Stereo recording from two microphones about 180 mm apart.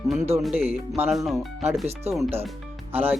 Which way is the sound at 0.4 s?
10° right (ahead or behind).